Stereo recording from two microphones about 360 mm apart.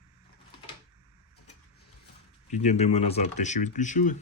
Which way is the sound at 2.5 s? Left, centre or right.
Centre.